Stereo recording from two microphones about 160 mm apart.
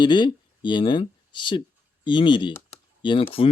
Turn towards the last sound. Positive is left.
turn(degrees=30)  # may be behind; listen again after turning